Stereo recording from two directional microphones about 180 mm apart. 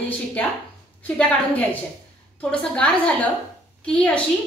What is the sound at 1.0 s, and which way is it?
A woman's voice, 10° left (ahead or behind).